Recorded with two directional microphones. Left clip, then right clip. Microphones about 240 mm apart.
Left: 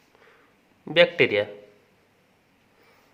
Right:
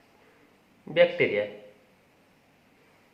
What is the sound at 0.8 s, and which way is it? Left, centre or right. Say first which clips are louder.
Speech: left 3 dB; left.